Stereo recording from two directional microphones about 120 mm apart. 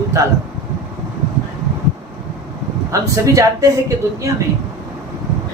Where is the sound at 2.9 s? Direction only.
25° right (ahead or behind).